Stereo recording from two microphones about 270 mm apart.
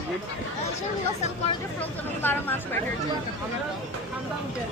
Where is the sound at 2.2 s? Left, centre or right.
Centre.